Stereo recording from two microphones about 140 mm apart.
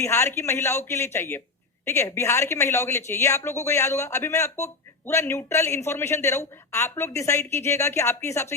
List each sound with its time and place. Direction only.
0.0 s a woman's voice: 20° left (ahead or behind)